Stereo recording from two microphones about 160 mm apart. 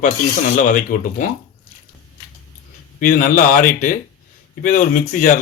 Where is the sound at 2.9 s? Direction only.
60° left (ahead or behind).